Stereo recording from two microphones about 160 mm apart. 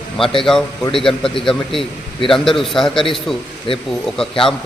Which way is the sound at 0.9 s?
35° left (ahead or behind).